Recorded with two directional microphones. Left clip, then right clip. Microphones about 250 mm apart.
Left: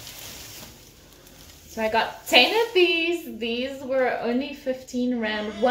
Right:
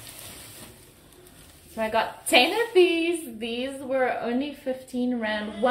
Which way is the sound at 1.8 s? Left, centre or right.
Centre.